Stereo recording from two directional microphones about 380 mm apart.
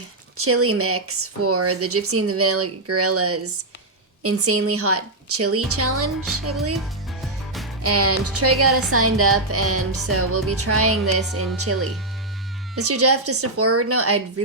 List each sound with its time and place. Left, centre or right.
0.3 s speech: right
7.8 s speech: right